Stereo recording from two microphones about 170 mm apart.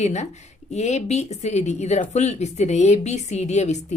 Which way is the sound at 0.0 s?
40° left (ahead or behind).